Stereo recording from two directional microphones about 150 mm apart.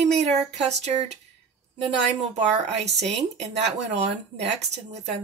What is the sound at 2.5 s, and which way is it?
Speech, 45° right (ahead or behind).